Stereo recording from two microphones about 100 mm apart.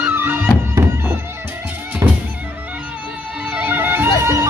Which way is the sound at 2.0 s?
30° right (ahead or behind).